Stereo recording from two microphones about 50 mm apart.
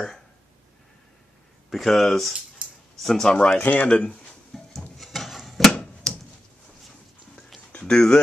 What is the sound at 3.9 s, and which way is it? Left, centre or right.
Speech, left.